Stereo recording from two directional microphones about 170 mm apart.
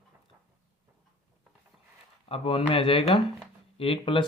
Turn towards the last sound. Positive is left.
turn(degrees=30)  # may be behind; listen again after turning